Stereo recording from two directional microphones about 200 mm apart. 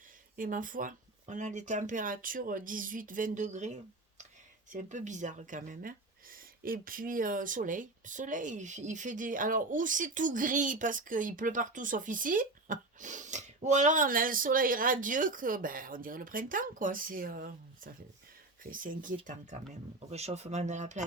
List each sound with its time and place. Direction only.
0.3 s speech: 45° right (ahead or behind)
20.1 s speech: 30° right (ahead or behind)